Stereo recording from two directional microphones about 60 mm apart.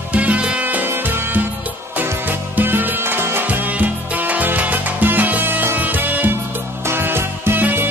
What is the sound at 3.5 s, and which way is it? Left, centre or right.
Music, right.